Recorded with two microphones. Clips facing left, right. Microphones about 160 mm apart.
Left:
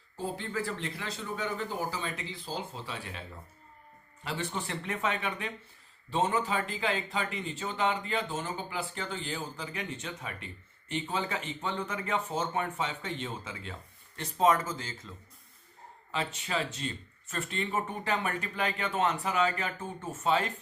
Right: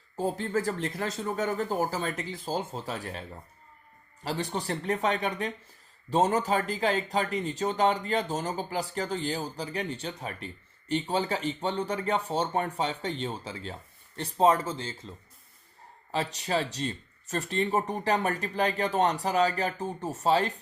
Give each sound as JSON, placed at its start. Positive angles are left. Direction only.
{"t": 0.2, "sound": "speech", "side_deg": -40}
{"t": 16.1, "sound": "speech", "side_deg": -40}